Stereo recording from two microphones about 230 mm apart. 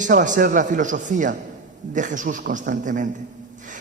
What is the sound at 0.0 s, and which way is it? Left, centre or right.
A man's voice, right.